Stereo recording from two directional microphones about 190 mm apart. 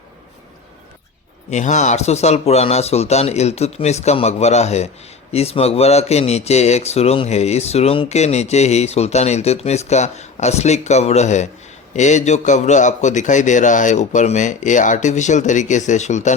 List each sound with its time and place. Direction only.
1.5 s speech: 40° left (ahead or behind)